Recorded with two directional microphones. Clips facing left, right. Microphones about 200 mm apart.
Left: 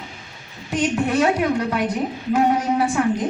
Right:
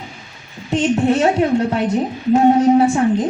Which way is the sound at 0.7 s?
30° right (ahead or behind).